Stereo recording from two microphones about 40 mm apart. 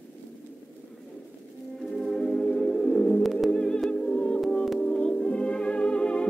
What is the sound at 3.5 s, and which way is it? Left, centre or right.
Music, left.